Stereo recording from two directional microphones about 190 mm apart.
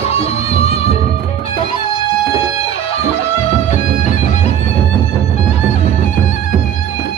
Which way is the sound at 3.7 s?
40° left (ahead or behind).